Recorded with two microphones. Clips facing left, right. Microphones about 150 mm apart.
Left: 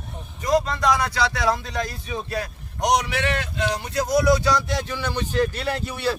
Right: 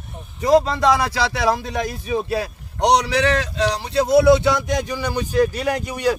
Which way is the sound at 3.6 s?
35° right (ahead or behind).